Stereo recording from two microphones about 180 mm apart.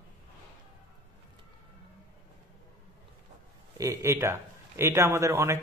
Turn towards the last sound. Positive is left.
turn(degrees=-15)  # may be behind; listen again after turning